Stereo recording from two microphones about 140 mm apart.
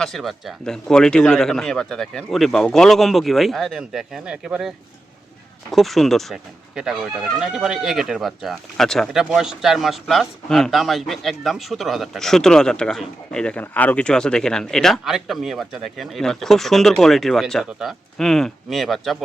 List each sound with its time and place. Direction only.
0.0 s speech: centre (ahead or behind)
5.7 s speech: centre (ahead or behind)